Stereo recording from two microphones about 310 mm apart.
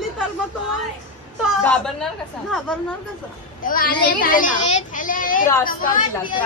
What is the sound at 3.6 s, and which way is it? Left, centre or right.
A woman's voice, left.